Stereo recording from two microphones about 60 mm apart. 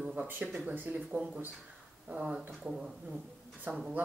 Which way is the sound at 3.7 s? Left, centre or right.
Right.